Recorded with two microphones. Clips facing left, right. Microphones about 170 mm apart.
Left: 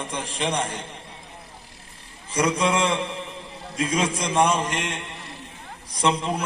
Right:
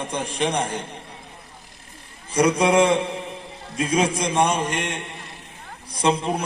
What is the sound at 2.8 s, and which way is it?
Mantra, 35° right (ahead or behind).